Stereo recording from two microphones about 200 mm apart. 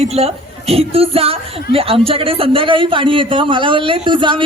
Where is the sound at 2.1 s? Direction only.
25° right (ahead or behind).